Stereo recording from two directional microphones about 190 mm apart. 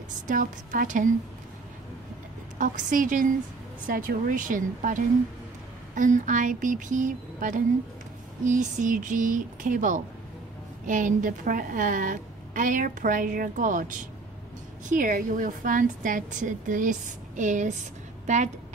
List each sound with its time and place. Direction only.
0.3 s a woman's voice: 45° right (ahead or behind)
2.6 s a woman's voice: 45° right (ahead or behind)